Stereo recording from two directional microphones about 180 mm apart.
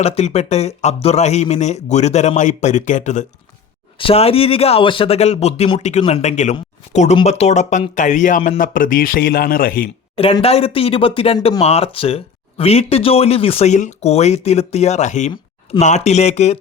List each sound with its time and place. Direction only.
0.0 s speech: 35° left (ahead or behind)
3.9 s speech: 30° left (ahead or behind); by 9.9 s 50° left (ahead or behind)
10.2 s speech: 30° left (ahead or behind)